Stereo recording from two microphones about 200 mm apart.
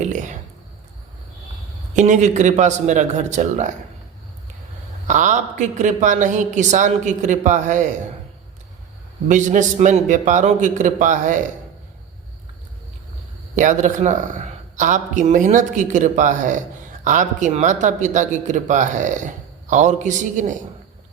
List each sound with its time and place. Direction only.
0.0 s a sound: 40° right (ahead or behind)
2.0 s speech: 35° right (ahead or behind)
5.0 s speech: 40° right (ahead or behind)
9.3 s speech: 40° right (ahead or behind)
13.6 s speech: 40° right (ahead or behind)